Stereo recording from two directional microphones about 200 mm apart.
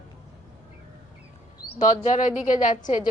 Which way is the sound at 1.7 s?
35° left (ahead or behind).